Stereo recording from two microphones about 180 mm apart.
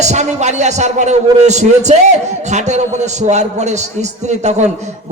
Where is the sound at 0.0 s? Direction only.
40° right (ahead or behind).